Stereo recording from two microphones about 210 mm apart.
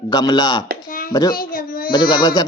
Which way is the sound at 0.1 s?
20° left (ahead or behind).